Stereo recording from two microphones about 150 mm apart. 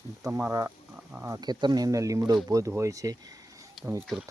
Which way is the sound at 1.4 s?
30° right (ahead or behind).